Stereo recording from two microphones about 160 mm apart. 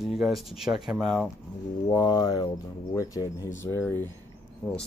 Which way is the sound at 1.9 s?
25° left (ahead or behind).